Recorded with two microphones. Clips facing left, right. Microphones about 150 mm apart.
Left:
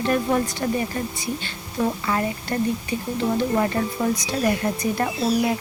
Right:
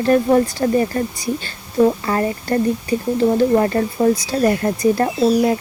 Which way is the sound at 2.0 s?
40° right (ahead or behind).